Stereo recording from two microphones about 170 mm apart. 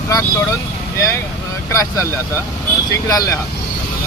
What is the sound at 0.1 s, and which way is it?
Speech, 15° left (ahead or behind).